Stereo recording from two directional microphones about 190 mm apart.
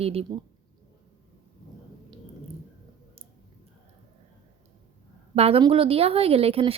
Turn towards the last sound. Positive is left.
turn(degrees=-30)  # may be behind; listen again after turning